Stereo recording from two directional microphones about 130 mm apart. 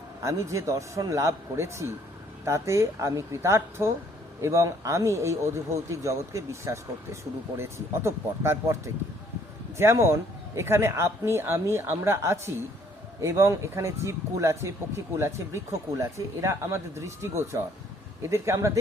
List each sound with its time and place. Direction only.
0.2 s a man's voice: 25° right (ahead or behind)